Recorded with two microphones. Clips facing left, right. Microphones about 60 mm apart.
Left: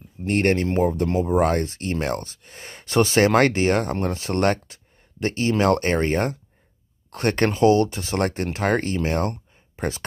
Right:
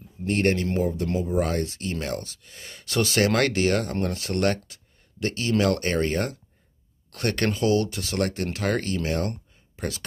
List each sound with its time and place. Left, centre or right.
0.3 s speech: left